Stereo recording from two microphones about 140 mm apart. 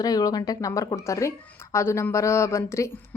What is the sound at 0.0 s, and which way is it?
A woman's voice, 25° left (ahead or behind).